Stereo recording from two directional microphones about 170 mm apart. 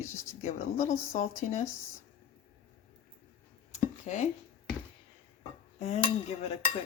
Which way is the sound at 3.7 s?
45° left (ahead or behind).